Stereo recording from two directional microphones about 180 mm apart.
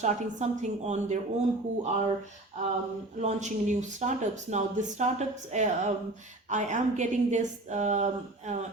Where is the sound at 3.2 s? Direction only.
40° right (ahead or behind).